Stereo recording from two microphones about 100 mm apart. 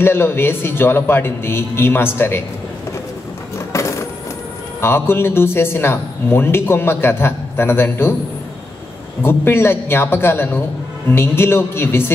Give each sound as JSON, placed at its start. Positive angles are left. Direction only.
{"t": 0.0, "sound": "speech", "side_deg": 25}
{"t": 3.5, "sound": "coin", "side_deg": 30}
{"t": 4.8, "sound": "speech", "side_deg": 25}
{"t": 9.2, "sound": "speech", "side_deg": 25}